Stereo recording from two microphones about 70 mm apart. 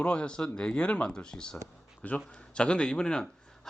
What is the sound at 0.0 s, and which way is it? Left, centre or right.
A man's voice, centre.